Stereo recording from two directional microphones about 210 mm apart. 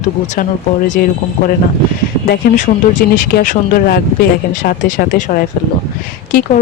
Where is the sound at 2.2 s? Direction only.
40° left (ahead or behind).